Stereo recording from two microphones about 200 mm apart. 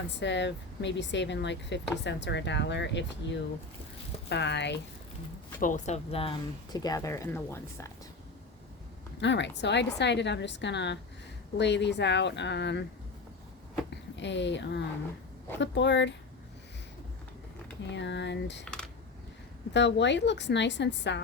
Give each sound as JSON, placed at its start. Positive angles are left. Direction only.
{"t": 0.2, "sound": "a woman's voice", "side_deg": 60}
{"t": 4.3, "sound": "a woman's voice", "side_deg": 60}
{"t": 5.5, "sound": "speech", "side_deg": 40}
{"t": 6.7, "sound": "speech", "side_deg": 20}
{"t": 9.2, "sound": "a woman's voice", "side_deg": 60}
{"t": 13.9, "sound": "a woman's voice", "side_deg": 60}
{"t": 17.9, "sound": "a woman's voice", "side_deg": 60}
{"t": 18.6, "sound": "computer keyboard", "side_deg": 5}
{"t": 19.7, "sound": "a woman's voice", "side_deg": 60}